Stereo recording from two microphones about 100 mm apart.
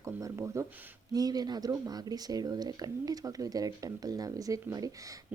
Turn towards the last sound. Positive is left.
turn(degrees=-35)  # may be behind; listen again after turning